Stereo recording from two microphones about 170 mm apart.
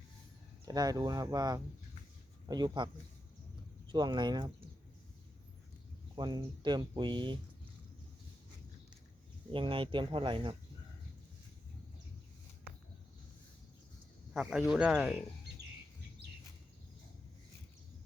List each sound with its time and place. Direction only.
0.6 s speech: 20° right (ahead or behind)
3.9 s speech: 25° right (ahead or behind)
6.1 s speech: 25° right (ahead or behind)
9.5 s speech: 30° right (ahead or behind)
14.7 s speech: 5° right (ahead or behind)